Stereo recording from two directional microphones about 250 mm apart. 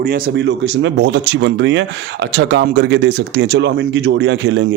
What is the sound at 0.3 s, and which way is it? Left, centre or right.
Speech, right.